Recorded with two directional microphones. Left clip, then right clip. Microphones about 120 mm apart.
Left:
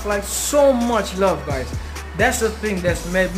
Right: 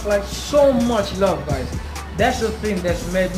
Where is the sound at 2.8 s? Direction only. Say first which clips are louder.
Left 2 dB; 50° left (ahead or behind).